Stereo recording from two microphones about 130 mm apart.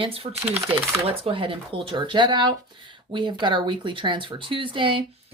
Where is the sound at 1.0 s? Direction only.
45° right (ahead or behind).